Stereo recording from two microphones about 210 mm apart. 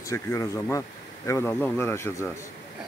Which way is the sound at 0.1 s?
15° left (ahead or behind).